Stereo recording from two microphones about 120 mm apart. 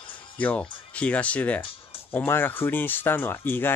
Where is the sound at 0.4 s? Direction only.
10° left (ahead or behind).